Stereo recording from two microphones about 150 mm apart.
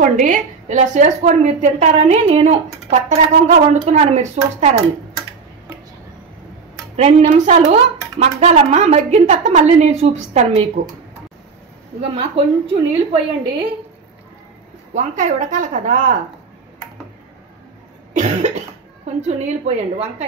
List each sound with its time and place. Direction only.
0.0 s a woman's voice: 60° right (ahead or behind)
7.0 s a woman's voice: 45° right (ahead or behind)
12.0 s a woman's voice: 40° right (ahead or behind)
15.0 s a woman's voice: 55° right (ahead or behind)
18.1 s cough: 50° right (ahead or behind)
19.2 s a woman's voice: 45° right (ahead or behind)